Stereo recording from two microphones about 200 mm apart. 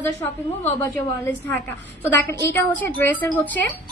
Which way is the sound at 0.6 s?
10° left (ahead or behind).